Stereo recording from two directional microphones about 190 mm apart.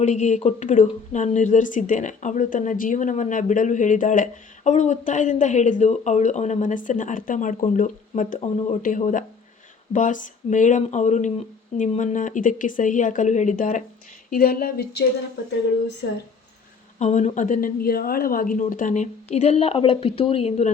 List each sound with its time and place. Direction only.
0.0 s speech: 40° left (ahead or behind); by 15.0 s 55° left (ahead or behind)
17.0 s speech: 35° left (ahead or behind)